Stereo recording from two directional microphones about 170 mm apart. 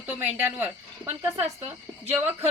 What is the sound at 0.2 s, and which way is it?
Speech, 10° right (ahead or behind).